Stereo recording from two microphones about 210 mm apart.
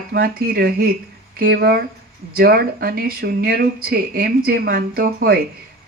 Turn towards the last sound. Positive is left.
turn(degrees=-45)  # may be behind; listen again after turning